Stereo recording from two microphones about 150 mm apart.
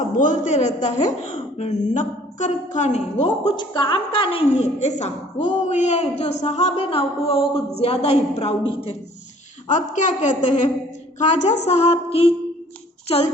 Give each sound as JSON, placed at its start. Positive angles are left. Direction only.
{"t": 0.0, "sound": "a man's voice", "side_deg": 60}
{"t": 3.5, "sound": "a woman's voice", "side_deg": 30}
{"t": 9.6, "sound": "a woman's voice", "side_deg": 55}